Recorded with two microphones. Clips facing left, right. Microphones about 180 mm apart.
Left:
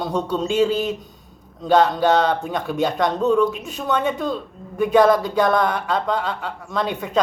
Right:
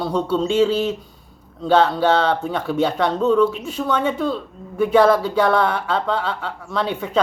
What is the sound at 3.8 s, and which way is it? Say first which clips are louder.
Speech: right 1 dB; 45° left (ahead or behind).